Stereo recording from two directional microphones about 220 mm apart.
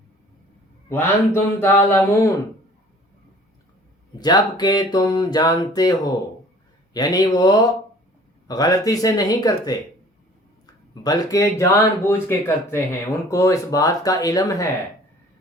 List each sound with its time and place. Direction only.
0.9 s speech: 10° left (ahead or behind)
4.2 s mantra: 20° left (ahead or behind)
6.9 s speech: 20° left (ahead or behind)
11.0 s speech: 15° left (ahead or behind)